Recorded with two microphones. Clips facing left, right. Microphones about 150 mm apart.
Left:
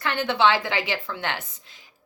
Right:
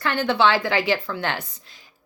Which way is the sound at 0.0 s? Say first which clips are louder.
Right 2 dB; 20° left (ahead or behind).